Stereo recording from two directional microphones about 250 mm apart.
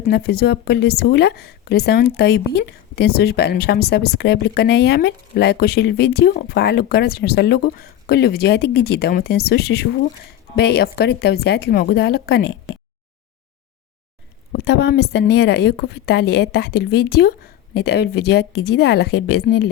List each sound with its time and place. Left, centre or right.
0.1 s a woman's voice: left
14.6 s a woman's voice: left